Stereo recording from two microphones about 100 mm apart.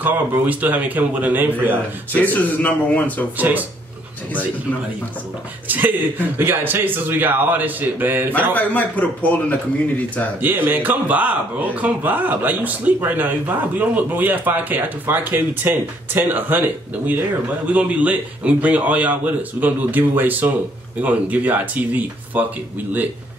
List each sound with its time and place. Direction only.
0.0 s speech: 15° right (ahead or behind)
2.3 s speech: 15° left (ahead or behind)
3.3 s speech: 15° right (ahead or behind)
5.7 s a man's voice: 20° right (ahead or behind)
8.5 s speech: 15° left (ahead or behind)
10.4 s speech: 20° right (ahead or behind)